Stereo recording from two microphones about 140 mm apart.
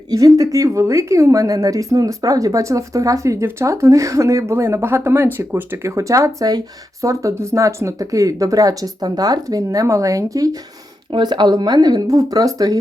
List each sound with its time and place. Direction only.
0.1 s a woman's voice: 25° right (ahead or behind)